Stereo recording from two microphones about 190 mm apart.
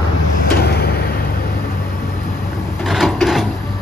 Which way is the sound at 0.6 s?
55° left (ahead or behind).